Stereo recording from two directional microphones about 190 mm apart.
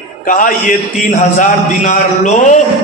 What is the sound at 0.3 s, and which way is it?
A man's voice, 45° left (ahead or behind).